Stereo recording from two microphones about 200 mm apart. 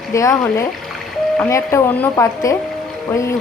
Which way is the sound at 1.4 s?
15° left (ahead or behind).